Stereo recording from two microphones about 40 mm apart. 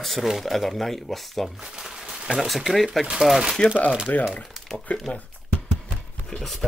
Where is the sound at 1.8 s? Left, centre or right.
Centre.